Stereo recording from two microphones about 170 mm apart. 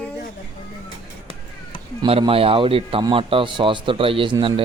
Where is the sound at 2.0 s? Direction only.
35° right (ahead or behind).